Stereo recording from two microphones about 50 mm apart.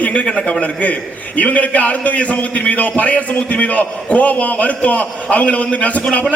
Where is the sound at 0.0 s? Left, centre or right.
Left.